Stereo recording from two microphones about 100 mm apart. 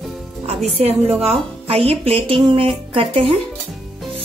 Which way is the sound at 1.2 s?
85° right.